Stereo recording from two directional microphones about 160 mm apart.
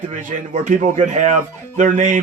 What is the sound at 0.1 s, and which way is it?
Speech, 50° right (ahead or behind).